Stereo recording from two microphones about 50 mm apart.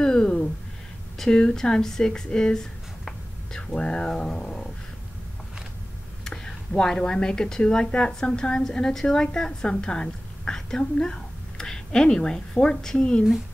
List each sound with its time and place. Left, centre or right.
0.0 s a sound: centre
1.1 s speech: centre
3.7 s speech: centre
6.2 s speech: centre